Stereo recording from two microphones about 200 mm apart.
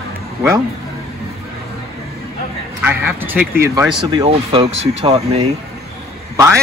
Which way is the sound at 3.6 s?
20° right (ahead or behind).